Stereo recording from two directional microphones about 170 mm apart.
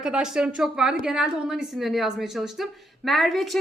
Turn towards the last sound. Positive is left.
turn(degrees=0)  # may be behind; listen again after turning